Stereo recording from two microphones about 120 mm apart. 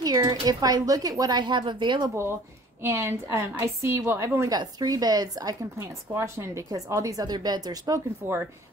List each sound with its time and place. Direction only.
0.0 s a woman's voice: 35° right (ahead or behind)
2.8 s a woman's voice: 20° right (ahead or behind)
4.5 s a woman's voice: 35° right (ahead or behind)